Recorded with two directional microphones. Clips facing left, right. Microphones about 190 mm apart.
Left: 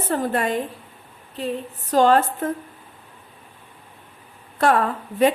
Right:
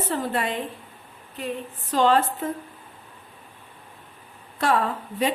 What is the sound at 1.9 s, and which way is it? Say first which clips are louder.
Speech: left 4 dB; 45° left (ahead or behind).